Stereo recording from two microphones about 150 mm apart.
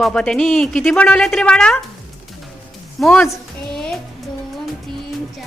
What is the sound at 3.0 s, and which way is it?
Speech, 5° left (ahead or behind).